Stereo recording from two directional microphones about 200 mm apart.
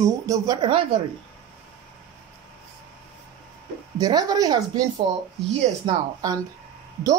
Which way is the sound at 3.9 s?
20° right (ahead or behind).